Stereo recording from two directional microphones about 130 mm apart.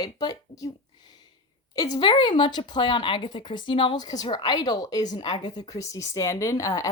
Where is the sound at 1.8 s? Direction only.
35° left (ahead or behind).